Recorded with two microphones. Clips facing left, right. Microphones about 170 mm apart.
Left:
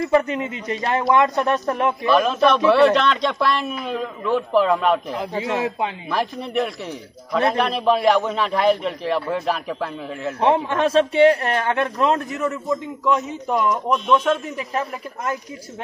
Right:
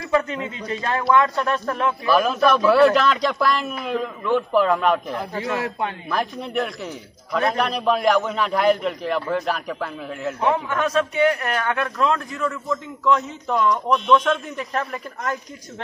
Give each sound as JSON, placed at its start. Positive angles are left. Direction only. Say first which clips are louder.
{"t": 0.1, "sound": "a man's voice", "louder": "even", "side_deg": 20}
{"t": 2.0, "sound": "a man's voice", "louder": "left 1 dB", "side_deg": 0}
{"t": 5.3, "sound": "a man's voice", "louder": "left 3 dB", "side_deg": 15}
{"t": 6.0, "sound": "a man's voice", "louder": "left 1 dB", "side_deg": 0}
{"t": 10.4, "sound": "a man's voice", "louder": "left 4 dB", "side_deg": 30}